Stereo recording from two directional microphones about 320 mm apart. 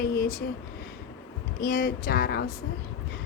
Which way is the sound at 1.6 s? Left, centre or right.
Left.